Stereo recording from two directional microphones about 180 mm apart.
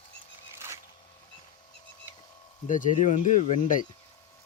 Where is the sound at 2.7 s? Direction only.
45° left (ahead or behind).